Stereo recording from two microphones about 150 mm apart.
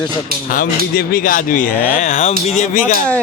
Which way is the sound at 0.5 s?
70° left (ahead or behind).